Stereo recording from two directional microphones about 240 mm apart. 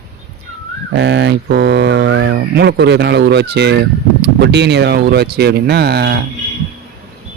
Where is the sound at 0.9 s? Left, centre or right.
Right.